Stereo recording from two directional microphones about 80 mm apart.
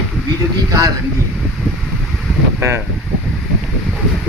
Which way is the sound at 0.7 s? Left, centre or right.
Right.